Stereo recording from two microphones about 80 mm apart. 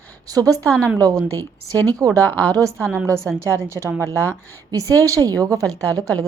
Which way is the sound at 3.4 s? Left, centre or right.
Right.